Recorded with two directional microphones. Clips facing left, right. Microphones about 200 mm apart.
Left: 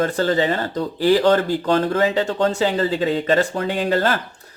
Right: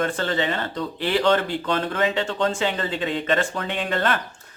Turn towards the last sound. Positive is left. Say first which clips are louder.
# left 5 dB
turn(degrees=35)  # may be behind; listen again after turning